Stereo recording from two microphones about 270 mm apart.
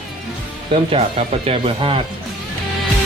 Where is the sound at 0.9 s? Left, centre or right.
Right.